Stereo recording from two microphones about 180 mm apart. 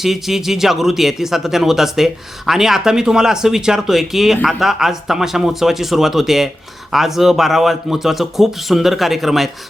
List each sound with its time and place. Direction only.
0.0 s speech: centre (ahead or behind)